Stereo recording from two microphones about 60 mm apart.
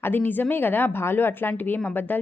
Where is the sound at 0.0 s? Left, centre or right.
Left.